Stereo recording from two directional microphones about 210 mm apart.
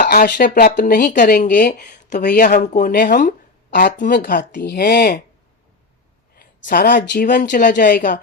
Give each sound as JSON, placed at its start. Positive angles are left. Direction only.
{"t": 0.0, "sound": "speech", "side_deg": 45}
{"t": 2.1, "sound": "speech", "side_deg": 50}
{"t": 2.6, "sound": "speech", "side_deg": 35}
{"t": 3.7, "sound": "speech", "side_deg": 55}
{"t": 6.3, "sound": "speech", "side_deg": 45}